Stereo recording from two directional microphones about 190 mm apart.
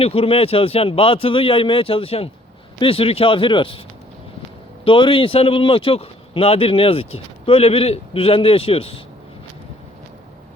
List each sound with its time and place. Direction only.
0.0 s speech: 30° left (ahead or behind)
4.9 s speech: 30° left (ahead or behind)